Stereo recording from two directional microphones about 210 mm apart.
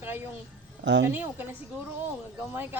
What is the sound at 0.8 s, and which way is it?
Speech, 55° right (ahead or behind).